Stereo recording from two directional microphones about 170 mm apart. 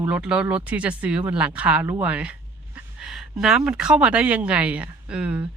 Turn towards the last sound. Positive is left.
turn(degrees=-5)  # may be behind; listen again after turning